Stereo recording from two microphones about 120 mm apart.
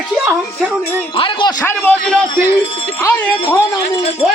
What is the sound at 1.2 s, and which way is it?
Speech, 40° left (ahead or behind).